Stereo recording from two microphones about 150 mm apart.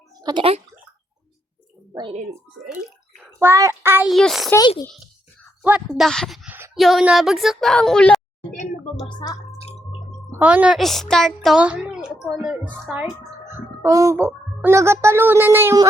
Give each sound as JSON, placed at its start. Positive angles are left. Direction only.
{"t": 0.2, "sound": "speech", "side_deg": -25}
{"t": 3.3, "sound": "speech", "side_deg": -15}
{"t": 4.1, "sound": "a woman's voice", "side_deg": 0}
{"t": 6.0, "sound": "a woman's voice", "side_deg": 0}
{"t": 9.0, "sound": "speech", "side_deg": 30}
{"t": 10.3, "sound": "a woman's voice", "side_deg": -10}
{"t": 13.5, "sound": "speech", "side_deg": -20}